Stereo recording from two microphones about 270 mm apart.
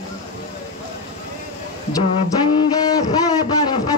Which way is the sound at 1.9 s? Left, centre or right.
Centre.